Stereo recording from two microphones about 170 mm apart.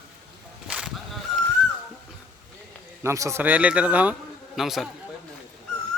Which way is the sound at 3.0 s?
15° right (ahead or behind).